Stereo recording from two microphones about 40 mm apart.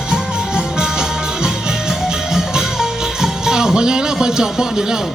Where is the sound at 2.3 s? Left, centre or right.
Centre.